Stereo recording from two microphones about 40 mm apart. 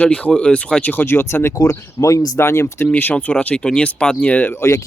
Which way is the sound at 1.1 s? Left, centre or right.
Left.